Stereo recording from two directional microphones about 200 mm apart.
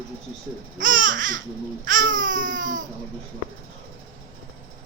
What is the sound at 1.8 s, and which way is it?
Babbling, 40° right (ahead or behind).